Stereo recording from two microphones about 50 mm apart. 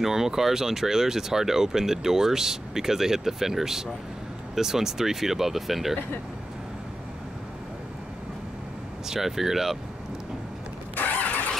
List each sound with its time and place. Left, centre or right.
0.0 s speech: centre
9.1 s speech: centre
11.0 s vehicle: left